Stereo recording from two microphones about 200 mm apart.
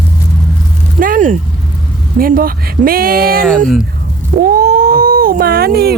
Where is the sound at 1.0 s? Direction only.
40° right (ahead or behind).